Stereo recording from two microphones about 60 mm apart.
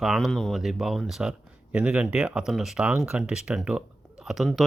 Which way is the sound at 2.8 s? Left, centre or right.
Centre.